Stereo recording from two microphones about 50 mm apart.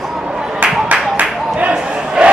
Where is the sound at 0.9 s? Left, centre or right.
Right.